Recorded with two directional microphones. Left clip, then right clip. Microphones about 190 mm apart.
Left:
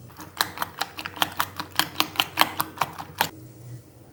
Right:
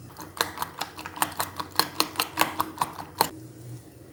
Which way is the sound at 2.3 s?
10° left (ahead or behind).